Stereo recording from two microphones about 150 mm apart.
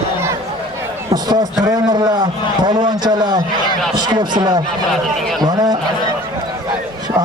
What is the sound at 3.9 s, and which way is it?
A man's voice, 30° right (ahead or behind).